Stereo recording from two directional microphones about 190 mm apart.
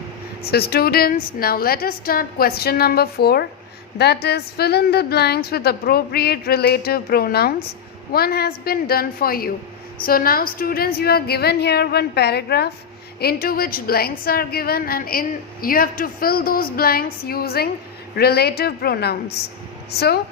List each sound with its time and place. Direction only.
0.5 s a woman's voice: 55° left (ahead or behind)